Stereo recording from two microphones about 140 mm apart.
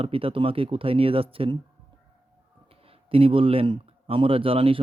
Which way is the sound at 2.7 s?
40° right (ahead or behind).